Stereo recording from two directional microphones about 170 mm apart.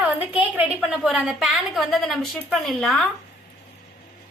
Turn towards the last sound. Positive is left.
turn(degrees=0)  # may be behind; listen again after turning